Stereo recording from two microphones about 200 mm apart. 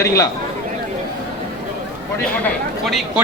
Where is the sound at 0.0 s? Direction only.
15° left (ahead or behind).